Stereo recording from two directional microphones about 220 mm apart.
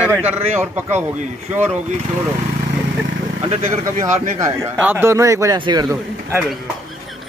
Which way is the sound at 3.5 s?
35° right (ahead or behind).